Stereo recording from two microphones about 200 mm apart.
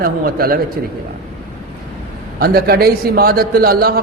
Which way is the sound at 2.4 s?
50° right (ahead or behind).